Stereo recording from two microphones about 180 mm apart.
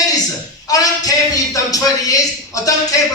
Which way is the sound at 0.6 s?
20° left (ahead or behind).